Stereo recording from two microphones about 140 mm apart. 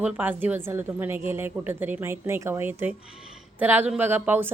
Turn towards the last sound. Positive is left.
turn(degrees=-15)  # may be behind; listen again after turning